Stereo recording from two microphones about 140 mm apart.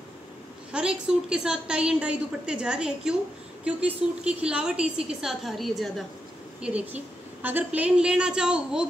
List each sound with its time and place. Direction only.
0.7 s a woman's voice: 5° right (ahead or behind)
7.4 s a woman's voice: 10° right (ahead or behind)